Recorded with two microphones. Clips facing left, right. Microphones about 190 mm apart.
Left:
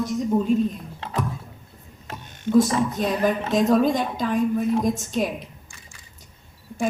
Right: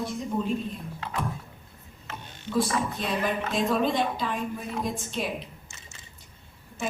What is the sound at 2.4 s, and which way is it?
Speech, 45° left (ahead or behind).